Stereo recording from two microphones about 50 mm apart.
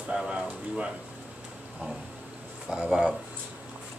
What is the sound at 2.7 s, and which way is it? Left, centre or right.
Speech, centre.